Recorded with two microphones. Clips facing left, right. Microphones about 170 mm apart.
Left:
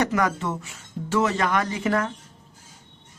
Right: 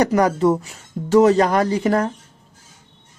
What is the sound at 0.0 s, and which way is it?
Speech, 35° right (ahead or behind).